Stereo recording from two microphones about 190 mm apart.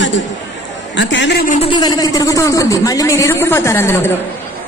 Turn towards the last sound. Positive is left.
turn(degrees=10)  # may be behind; listen again after turning